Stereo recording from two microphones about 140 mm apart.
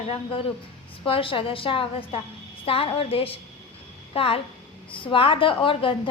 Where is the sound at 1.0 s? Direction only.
40° left (ahead or behind).